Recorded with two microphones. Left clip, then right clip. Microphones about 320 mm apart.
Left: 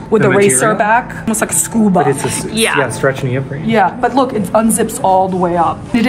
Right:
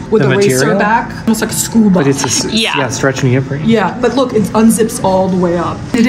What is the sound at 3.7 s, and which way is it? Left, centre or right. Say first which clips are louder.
A woman's voice: left 1 dB; left.